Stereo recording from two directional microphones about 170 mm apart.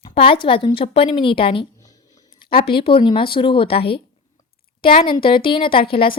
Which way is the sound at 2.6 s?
30° left (ahead or behind).